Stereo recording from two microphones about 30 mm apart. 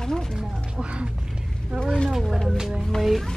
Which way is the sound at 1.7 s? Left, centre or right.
Right.